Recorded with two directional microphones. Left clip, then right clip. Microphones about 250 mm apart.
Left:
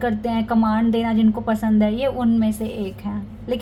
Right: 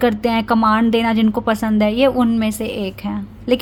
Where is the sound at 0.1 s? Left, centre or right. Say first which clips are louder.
Right 6 dB; right.